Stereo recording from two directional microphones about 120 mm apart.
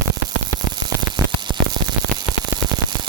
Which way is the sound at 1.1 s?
40° right (ahead or behind).